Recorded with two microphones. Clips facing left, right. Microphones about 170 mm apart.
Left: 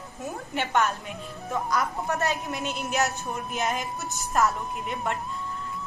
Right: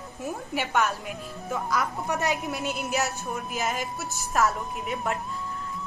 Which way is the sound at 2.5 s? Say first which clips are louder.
Right 1 dB; centre (ahead or behind).